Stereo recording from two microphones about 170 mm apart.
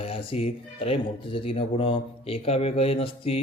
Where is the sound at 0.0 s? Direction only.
35° left (ahead or behind).